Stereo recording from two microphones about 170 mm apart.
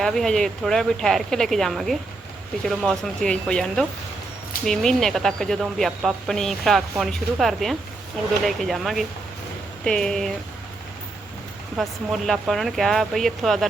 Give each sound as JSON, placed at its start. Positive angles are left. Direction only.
{"t": 0.0, "sound": "speech", "side_deg": 5}
{"t": 11.8, "sound": "speech", "side_deg": 0}